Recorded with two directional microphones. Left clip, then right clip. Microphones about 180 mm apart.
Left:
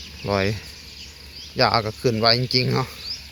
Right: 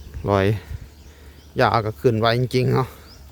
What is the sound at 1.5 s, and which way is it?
Speech, 20° right (ahead or behind).